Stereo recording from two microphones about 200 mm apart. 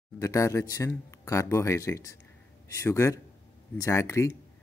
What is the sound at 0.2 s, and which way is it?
Speech, 15° left (ahead or behind).